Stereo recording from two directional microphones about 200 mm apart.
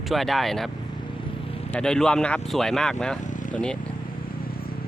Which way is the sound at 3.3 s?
40° left (ahead or behind).